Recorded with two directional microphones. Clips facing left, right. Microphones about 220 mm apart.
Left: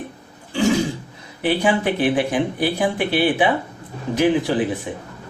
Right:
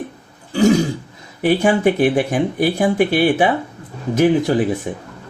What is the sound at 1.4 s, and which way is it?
Speech, 45° right (ahead or behind).